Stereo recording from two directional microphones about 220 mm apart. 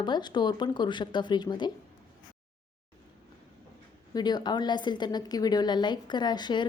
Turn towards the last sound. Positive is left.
turn(degrees=20)  # may be behind; listen again after turning